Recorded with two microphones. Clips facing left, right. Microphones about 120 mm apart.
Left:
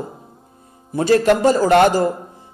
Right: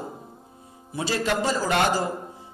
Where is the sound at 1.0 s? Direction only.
50° left (ahead or behind).